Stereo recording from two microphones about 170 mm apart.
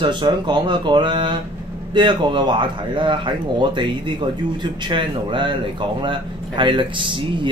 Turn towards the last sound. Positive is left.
turn(degrees=-30)  # may be behind; listen again after turning